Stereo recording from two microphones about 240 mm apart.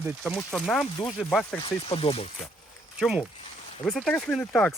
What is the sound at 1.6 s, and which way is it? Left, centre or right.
Speech, left.